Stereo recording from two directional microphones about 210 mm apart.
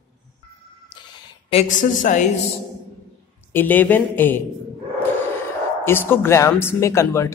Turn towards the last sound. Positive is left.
turn(degrees=15)  # may be behind; listen again after turning